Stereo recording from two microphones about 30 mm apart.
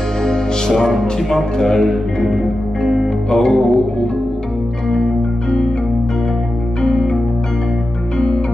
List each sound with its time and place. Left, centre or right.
0.2 s music: centre
1.3 s a man's voice: centre
2.3 s music: centre
3.3 s a man's voice: centre
6.8 s music: centre